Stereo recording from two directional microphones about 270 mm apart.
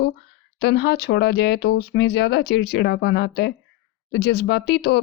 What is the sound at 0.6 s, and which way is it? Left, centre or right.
Speech, left.